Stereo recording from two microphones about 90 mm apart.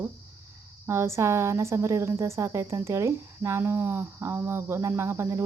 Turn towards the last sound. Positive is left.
turn(degrees=-30)  # may be behind; listen again after turning